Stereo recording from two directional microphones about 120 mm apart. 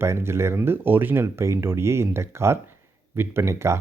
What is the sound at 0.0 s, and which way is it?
Speech, 20° right (ahead or behind).